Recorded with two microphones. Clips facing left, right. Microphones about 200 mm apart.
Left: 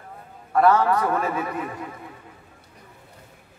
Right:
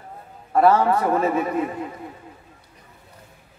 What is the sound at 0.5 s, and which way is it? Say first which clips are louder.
Speech: right 2 dB; 25° right (ahead or behind).